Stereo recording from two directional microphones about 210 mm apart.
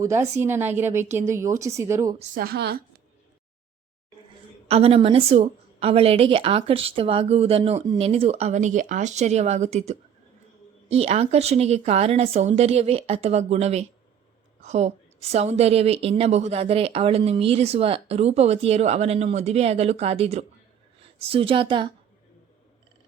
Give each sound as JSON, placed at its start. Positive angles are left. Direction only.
{"t": 0.0, "sound": "a woman's voice", "side_deg": -15}
{"t": 2.1, "sound": "a woman's voice", "side_deg": -45}
{"t": 4.7, "sound": "a woman's voice", "side_deg": -30}